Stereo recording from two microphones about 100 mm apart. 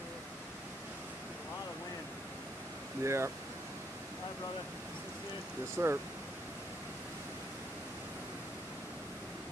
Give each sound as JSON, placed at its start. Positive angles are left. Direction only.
{"t": 3.0, "sound": "speech", "side_deg": -30}
{"t": 5.8, "sound": "speech", "side_deg": -25}